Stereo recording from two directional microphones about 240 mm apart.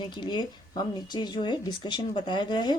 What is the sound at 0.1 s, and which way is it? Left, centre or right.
Speech, centre.